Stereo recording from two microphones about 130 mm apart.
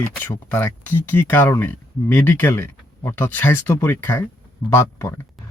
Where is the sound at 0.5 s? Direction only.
15° left (ahead or behind).